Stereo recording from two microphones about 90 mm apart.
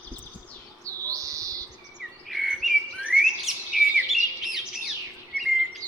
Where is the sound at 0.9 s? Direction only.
40° right (ahead or behind).